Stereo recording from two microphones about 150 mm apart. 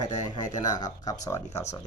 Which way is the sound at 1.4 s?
50° left (ahead or behind).